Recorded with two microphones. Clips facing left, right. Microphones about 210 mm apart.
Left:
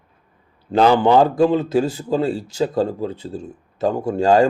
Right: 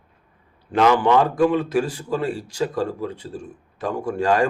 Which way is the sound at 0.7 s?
30° left (ahead or behind).